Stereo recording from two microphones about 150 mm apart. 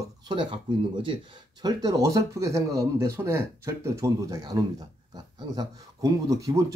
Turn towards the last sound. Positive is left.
turn(degrees=-20)  # may be behind; listen again after turning